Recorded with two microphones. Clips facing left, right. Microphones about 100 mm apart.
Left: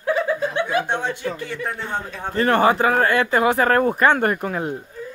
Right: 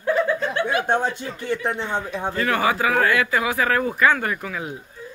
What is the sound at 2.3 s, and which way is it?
Speech, 40° left (ahead or behind).